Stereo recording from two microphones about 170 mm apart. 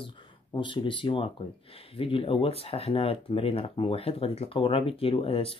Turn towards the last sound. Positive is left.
turn(degrees=35)  # may be behind; listen again after turning